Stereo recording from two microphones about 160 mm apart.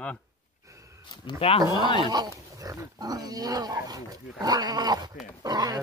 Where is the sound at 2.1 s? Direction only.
25° right (ahead or behind).